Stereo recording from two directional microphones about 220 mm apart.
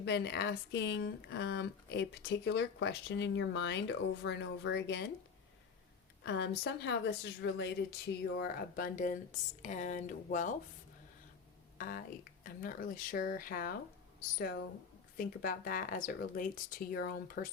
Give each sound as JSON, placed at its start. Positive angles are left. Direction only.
{"t": 0.0, "sound": "speech", "side_deg": 50}
{"t": 6.2, "sound": "speech", "side_deg": 50}
{"t": 11.8, "sound": "speech", "side_deg": 40}
{"t": 15.2, "sound": "speech", "side_deg": 40}